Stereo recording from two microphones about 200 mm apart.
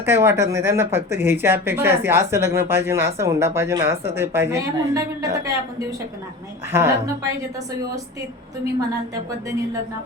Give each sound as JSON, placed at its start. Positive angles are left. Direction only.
{"t": 0.0, "sound": "speech", "side_deg": -10}
{"t": 6.7, "sound": "speech", "side_deg": -10}